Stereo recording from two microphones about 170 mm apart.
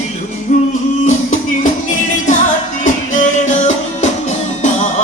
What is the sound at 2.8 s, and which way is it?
Music, 45° left (ahead or behind).